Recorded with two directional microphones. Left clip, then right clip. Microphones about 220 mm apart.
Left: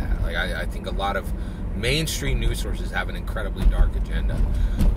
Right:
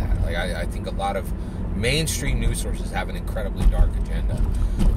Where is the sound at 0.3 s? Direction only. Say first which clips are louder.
Left 1 dB; 10° left (ahead or behind).